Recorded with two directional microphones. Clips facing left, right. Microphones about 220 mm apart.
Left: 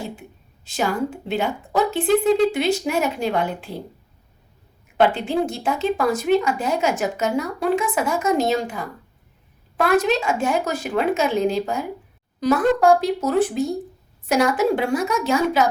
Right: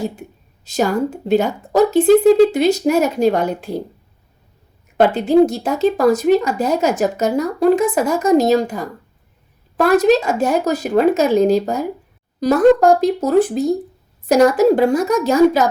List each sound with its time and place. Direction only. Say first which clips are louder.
0.0 s speech: right 7 dB; 40° right (ahead or behind)
4.9 s speech: right 7 dB; 40° right (ahead or behind)